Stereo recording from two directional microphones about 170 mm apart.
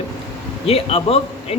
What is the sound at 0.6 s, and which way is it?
Speech, 35° left (ahead or behind).